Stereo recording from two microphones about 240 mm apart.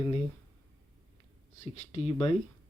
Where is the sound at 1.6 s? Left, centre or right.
Left.